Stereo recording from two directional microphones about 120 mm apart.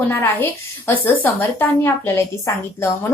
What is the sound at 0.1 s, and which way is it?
A woman's voice, 20° left (ahead or behind).